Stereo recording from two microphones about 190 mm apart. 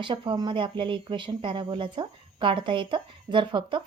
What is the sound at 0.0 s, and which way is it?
Speech, 25° right (ahead or behind).